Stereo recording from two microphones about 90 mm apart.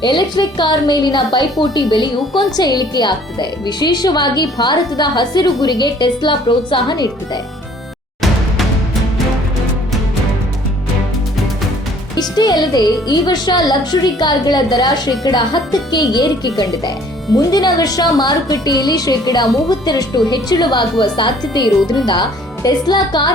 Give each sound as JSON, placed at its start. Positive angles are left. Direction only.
{"t": 0.0, "sound": "a woman's voice", "side_deg": 55}
{"t": 12.4, "sound": "a woman's voice", "side_deg": 50}